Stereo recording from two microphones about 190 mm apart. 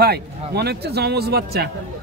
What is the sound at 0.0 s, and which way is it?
Speech, 55° right (ahead or behind).